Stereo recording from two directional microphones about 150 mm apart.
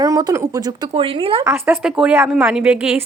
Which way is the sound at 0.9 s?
40° right (ahead or behind).